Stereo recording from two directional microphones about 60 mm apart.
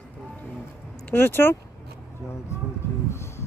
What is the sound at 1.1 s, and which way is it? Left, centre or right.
Speech, left.